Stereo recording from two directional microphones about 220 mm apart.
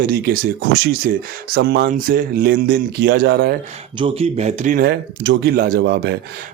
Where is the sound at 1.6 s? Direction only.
50° right (ahead or behind).